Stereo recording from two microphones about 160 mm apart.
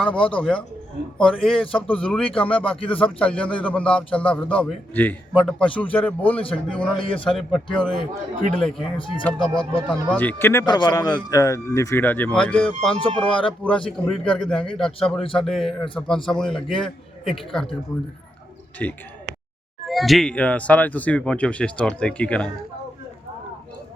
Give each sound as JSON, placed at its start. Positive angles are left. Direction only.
{"t": 0.0, "sound": "a man's voice", "side_deg": 5}
{"t": 7.0, "sound": "speech", "side_deg": 35}
{"t": 7.3, "sound": "a man's voice", "side_deg": 5}
{"t": 9.0, "sound": "speech", "side_deg": 30}
{"t": 9.9, "sound": "a man's voice", "side_deg": 10}
{"t": 18.8, "sound": "a man's voice", "side_deg": 10}